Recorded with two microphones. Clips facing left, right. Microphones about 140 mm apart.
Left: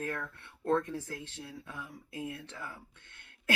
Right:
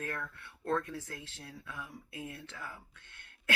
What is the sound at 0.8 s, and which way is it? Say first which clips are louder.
Speech: left 4 dB; 35° left (ahead or behind).